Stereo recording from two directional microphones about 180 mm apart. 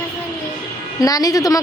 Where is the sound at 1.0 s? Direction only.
20° left (ahead or behind).